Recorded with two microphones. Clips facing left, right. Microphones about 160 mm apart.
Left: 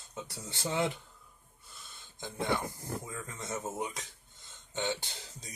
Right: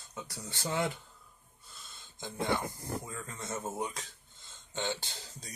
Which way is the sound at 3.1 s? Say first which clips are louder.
Left 1 dB; 20° left (ahead or behind).